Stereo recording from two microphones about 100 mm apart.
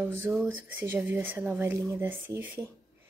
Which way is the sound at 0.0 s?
20° right (ahead or behind).